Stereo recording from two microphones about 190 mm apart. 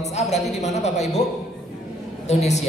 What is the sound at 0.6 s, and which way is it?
Speech, 35° left (ahead or behind).